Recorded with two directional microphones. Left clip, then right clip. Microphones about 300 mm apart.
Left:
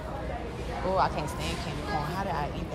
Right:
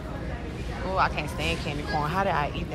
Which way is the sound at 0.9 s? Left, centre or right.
Centre.